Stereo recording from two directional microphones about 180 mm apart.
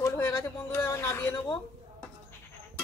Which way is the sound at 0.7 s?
15° left (ahead or behind).